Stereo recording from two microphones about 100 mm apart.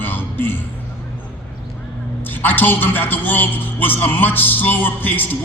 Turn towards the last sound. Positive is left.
turn(degrees=20)  # may be behind; listen again after turning